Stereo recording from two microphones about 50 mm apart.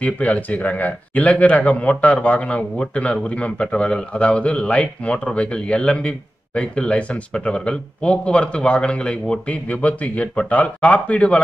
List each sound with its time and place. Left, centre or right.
0.0 s a man's voice: left